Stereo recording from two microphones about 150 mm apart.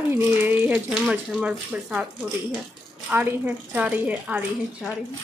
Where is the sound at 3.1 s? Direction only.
10° right (ahead or behind).